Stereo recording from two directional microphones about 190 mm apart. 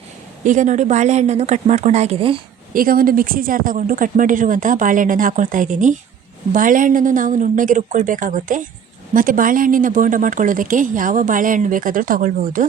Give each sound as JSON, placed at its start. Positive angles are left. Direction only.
{"t": 0.4, "sound": "speech", "side_deg": -40}
{"t": 2.7, "sound": "speech", "side_deg": -50}